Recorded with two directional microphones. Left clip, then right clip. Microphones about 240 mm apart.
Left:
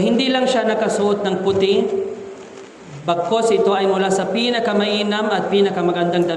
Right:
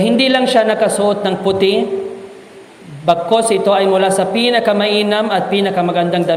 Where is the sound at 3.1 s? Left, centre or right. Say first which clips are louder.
Right 4 dB; right.